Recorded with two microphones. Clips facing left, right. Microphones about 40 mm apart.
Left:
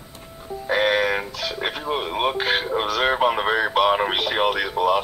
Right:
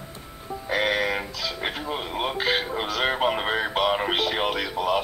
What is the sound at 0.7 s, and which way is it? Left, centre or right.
Speech, left.